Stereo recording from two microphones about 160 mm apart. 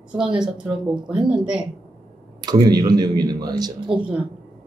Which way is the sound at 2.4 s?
25° right (ahead or behind).